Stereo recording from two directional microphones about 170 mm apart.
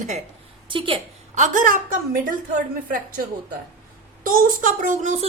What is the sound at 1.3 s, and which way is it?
A woman's voice, 50° right (ahead or behind).